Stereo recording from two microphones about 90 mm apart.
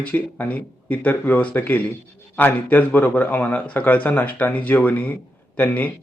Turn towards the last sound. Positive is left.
turn(degrees=20)  # may be behind; listen again after turning